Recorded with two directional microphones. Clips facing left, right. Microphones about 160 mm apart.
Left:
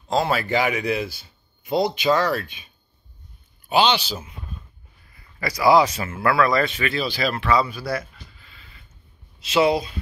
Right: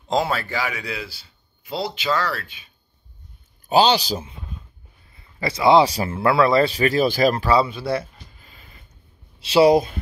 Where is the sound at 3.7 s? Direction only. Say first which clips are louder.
Right 3 dB; 40° right (ahead or behind).